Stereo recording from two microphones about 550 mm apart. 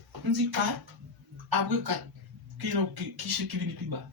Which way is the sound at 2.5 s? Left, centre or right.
Right.